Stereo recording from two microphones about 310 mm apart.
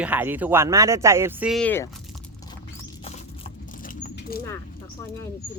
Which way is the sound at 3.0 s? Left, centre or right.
Left.